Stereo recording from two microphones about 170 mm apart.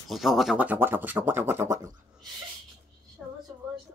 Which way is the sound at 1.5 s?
15° right (ahead or behind).